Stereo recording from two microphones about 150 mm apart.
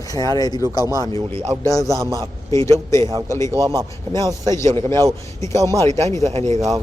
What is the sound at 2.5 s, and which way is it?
A man's voice, 20° left (ahead or behind).